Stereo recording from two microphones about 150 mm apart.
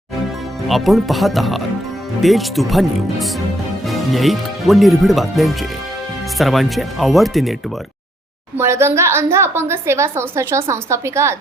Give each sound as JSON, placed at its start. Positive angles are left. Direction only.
{"t": 0.7, "sound": "speech", "side_deg": 0}
{"t": 8.5, "sound": "a woman's voice", "side_deg": -15}